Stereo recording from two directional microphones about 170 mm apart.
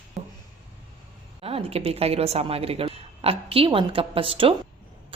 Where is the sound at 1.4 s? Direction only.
35° right (ahead or behind).